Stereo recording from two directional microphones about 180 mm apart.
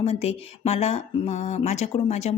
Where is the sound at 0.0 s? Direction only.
35° left (ahead or behind).